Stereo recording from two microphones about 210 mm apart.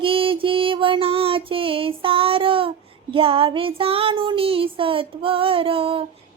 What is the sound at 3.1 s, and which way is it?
Mantra, 25° right (ahead or behind).